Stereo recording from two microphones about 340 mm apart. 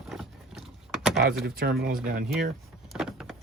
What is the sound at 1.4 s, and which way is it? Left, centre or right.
Speech, right.